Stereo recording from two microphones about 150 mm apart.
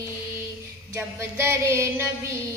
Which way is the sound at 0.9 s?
15° right (ahead or behind).